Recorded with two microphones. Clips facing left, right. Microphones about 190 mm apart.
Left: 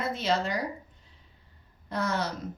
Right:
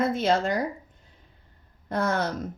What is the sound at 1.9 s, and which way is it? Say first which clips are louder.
Speech: right 4 dB; 50° right (ahead or behind).